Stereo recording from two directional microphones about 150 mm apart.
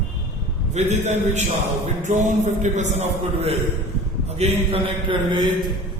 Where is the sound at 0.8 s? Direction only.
50° right (ahead or behind).